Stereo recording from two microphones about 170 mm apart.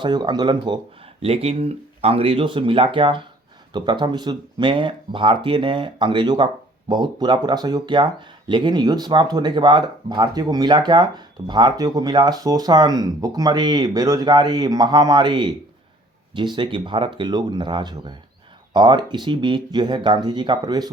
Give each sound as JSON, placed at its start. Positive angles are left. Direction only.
{"t": 0.0, "sound": "speech", "side_deg": -25}